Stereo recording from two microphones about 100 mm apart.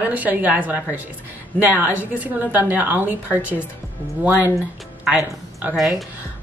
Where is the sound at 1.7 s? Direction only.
20° right (ahead or behind).